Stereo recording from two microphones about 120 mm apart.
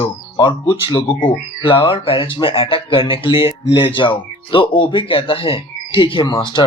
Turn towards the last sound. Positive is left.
turn(degrees=40)  # may be behind; listen again after turning